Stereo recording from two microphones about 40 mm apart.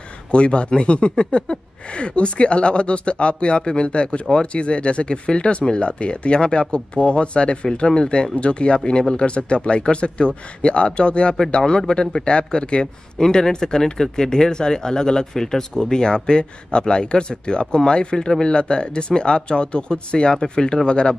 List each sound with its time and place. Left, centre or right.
0.3 s speech: left